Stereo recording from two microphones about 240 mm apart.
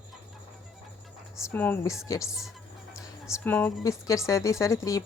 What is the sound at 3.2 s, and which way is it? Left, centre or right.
Speech, centre.